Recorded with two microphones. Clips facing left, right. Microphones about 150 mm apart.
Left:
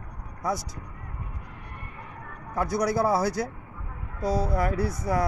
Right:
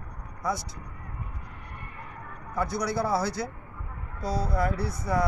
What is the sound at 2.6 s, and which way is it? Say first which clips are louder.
Speech: left 4 dB; 45° left (ahead or behind).